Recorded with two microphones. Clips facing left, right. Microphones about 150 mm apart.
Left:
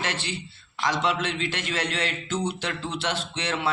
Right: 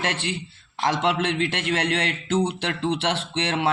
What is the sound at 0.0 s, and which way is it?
Speech, 60° right (ahead or behind).